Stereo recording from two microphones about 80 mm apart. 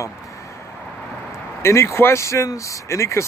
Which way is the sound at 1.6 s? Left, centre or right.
Left.